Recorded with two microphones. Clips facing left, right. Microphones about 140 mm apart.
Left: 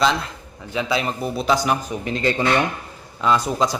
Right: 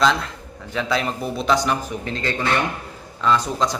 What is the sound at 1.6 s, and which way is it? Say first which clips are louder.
A man's voice: left 1 dB; 15° left (ahead or behind).